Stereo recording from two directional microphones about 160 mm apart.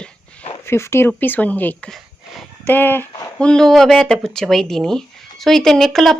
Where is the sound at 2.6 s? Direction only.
10° left (ahead or behind).